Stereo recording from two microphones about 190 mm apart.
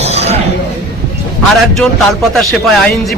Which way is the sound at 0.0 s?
35° right (ahead or behind).